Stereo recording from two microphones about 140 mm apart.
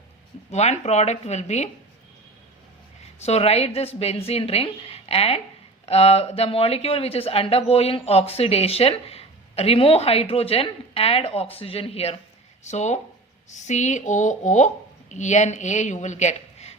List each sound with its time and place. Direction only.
0.5 s speech: 50° left (ahead or behind)
3.2 s a woman's voice: 50° left (ahead or behind)